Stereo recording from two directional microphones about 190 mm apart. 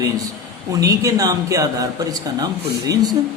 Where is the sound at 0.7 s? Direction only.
20° right (ahead or behind).